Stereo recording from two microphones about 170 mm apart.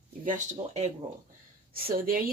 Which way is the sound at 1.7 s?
60° right (ahead or behind).